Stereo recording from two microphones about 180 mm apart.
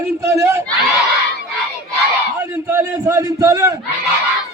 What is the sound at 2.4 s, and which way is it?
A man's voice, 15° right (ahead or behind).